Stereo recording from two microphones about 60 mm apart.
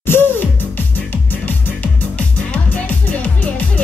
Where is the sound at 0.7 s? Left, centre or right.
Left.